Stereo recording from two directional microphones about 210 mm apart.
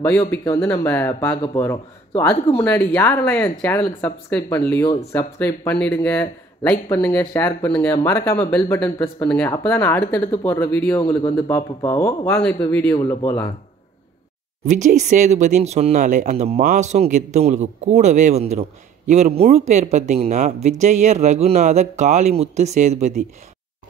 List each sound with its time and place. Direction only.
0.0 s speech: 10° left (ahead or behind)
14.7 s speech: 35° right (ahead or behind)